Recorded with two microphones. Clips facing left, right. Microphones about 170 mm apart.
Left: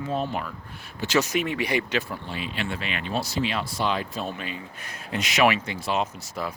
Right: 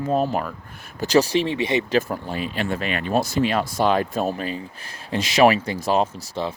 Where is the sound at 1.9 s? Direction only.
45° right (ahead or behind).